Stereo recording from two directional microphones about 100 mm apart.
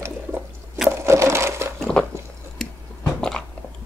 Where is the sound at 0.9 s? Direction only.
30° right (ahead or behind).